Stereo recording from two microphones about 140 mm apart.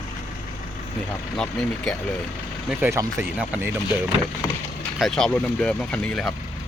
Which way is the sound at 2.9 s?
20° right (ahead or behind).